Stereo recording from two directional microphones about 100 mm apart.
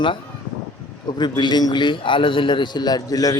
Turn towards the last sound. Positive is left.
turn(degrees=40)  # may be behind; listen again after turning